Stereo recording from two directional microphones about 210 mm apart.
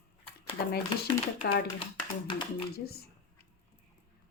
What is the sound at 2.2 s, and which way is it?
Speech, 25° left (ahead or behind).